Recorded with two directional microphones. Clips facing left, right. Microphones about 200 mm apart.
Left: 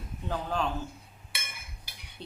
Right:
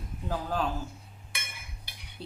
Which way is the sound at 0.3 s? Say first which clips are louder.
Even; 5° right (ahead or behind).